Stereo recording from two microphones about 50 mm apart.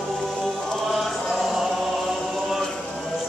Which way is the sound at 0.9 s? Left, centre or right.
Centre.